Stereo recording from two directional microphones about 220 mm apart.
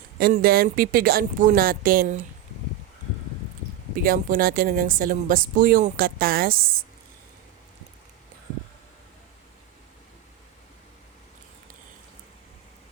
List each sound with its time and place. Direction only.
0.2 s speech: 40° right (ahead or behind)
3.9 s speech: 40° right (ahead or behind)